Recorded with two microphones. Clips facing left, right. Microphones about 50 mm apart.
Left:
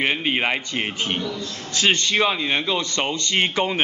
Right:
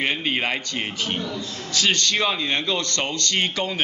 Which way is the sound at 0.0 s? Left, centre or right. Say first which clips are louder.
Left 2 dB; centre.